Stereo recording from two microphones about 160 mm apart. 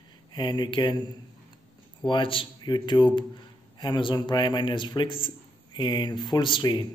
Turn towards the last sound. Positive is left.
turn(degrees=30)  # may be behind; listen again after turning